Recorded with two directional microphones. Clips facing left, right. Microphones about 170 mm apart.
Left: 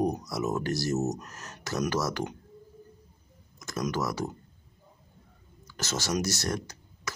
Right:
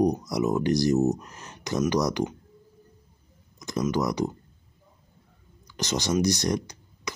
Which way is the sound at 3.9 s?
15° right (ahead or behind).